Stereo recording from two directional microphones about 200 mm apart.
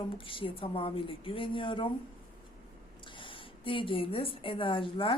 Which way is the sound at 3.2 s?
25° left (ahead or behind).